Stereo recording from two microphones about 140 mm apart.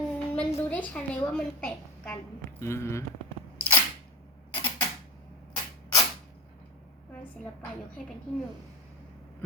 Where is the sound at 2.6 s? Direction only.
20° left (ahead or behind).